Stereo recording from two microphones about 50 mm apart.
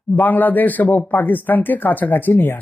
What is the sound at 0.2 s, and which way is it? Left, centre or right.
Speech, left.